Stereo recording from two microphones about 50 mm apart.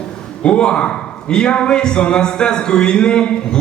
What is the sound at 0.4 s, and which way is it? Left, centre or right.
Speech, left.